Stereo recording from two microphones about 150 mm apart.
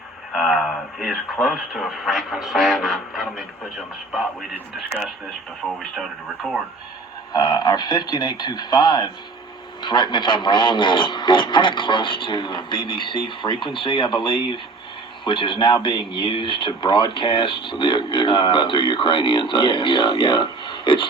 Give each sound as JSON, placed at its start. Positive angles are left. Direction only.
{"t": 0.3, "sound": "speech", "side_deg": 0}
{"t": 5.6, "sound": "speech", "side_deg": 5}
{"t": 7.3, "sound": "speech", "side_deg": 25}